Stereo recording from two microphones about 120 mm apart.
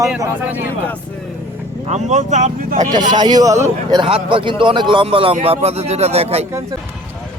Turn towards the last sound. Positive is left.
turn(degrees=-60)  # may be behind; listen again after turning